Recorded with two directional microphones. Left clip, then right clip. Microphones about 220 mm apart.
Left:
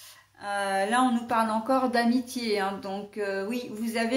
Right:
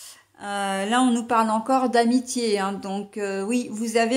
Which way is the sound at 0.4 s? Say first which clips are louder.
Right 1 dB; 45° right (ahead or behind).